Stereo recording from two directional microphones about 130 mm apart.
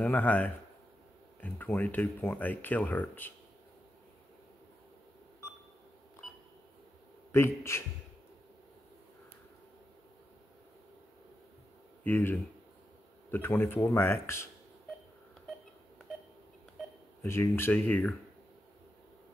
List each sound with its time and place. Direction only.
0.0 s speech: 15° left (ahead or behind)
7.3 s speech: 20° left (ahead or behind)
12.0 s speech: 15° left (ahead or behind)
17.2 s speech: 20° left (ahead or behind)